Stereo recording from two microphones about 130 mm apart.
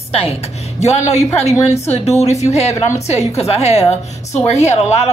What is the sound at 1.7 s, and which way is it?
A woman's voice, 55° left (ahead or behind).